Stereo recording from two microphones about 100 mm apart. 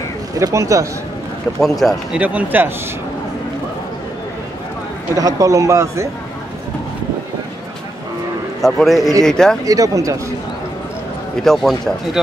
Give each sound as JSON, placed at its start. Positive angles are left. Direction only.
{"t": 0.4, "sound": "a man's voice", "side_deg": -35}
{"t": 1.6, "sound": "speech", "side_deg": 5}
{"t": 2.1, "sound": "speech", "side_deg": -15}
{"t": 5.1, "sound": "a man's voice", "side_deg": -35}
{"t": 8.5, "sound": "speech", "side_deg": 0}
{"t": 9.7, "sound": "a man's voice", "side_deg": -35}
{"t": 11.4, "sound": "speech", "side_deg": 5}